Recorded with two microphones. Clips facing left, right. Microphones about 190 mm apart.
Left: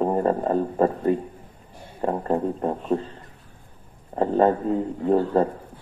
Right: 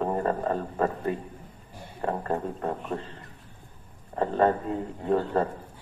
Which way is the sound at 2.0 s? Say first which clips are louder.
Left 5 dB; 30° left (ahead or behind).